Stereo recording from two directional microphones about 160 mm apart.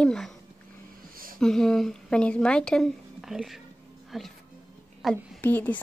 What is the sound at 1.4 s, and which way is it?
A woman's voice, 5° left (ahead or behind).